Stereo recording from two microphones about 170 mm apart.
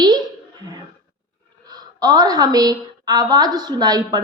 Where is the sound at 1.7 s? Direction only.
20° right (ahead or behind).